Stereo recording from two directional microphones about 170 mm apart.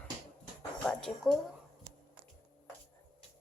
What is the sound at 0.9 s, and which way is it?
Speech, 5° left (ahead or behind).